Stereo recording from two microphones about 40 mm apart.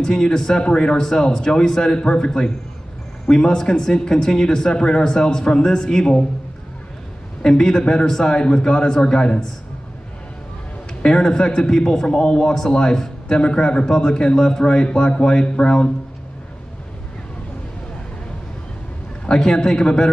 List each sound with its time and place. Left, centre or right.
0.0 s speech: centre
7.4 s a man's voice: centre
11.0 s a man's voice: centre
19.2 s speech: centre